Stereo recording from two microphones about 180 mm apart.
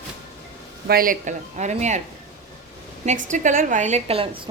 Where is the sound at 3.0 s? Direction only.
45° right (ahead or behind).